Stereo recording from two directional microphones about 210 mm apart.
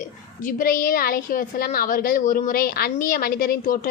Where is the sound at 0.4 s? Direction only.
45° left (ahead or behind).